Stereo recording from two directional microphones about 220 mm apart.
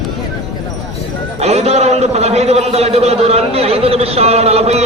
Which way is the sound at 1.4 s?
30° right (ahead or behind).